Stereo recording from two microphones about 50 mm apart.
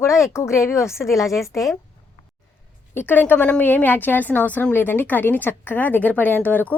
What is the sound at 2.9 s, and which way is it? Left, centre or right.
A woman's voice, left.